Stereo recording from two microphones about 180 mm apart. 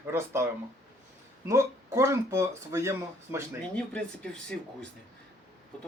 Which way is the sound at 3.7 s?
5° left (ahead or behind).